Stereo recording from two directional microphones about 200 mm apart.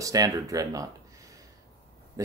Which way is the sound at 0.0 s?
20° right (ahead or behind).